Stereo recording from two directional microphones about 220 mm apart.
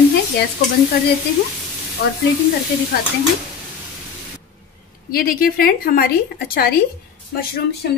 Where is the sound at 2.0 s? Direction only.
50° left (ahead or behind).